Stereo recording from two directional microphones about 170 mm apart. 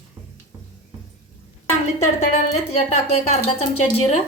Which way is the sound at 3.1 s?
35° left (ahead or behind).